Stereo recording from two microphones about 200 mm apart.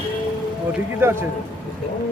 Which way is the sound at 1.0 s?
10° right (ahead or behind).